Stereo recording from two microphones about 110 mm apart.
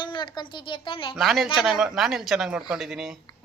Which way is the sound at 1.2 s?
Centre (ahead or behind).